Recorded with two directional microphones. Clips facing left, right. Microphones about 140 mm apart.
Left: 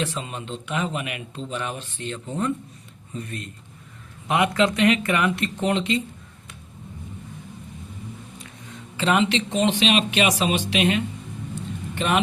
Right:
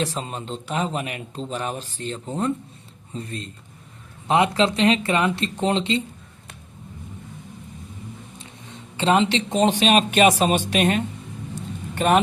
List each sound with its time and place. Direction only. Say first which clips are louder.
0.0 s speech: right 2 dB; 40° right (ahead or behind)
8.4 s speech: even; 30° right (ahead or behind)